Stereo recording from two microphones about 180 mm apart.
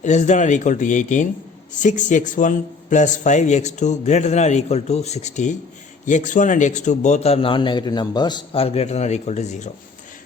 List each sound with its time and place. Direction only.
0.0 s speech: 40° left (ahead or behind)